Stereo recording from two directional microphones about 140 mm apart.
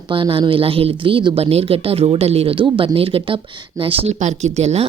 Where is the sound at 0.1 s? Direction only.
40° right (ahead or behind).